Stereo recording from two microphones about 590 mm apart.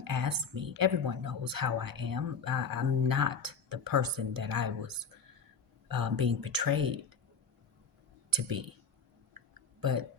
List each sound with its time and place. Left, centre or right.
0.0 s a woman's voice: right
8.3 s speech: right
9.8 s a woman's voice: right